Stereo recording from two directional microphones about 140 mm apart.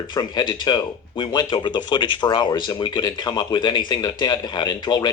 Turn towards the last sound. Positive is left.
turn(degrees=30)  # may be behind; listen again after turning